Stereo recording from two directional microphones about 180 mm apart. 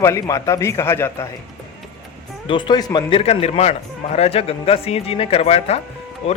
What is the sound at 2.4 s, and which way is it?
Speech, 25° left (ahead or behind).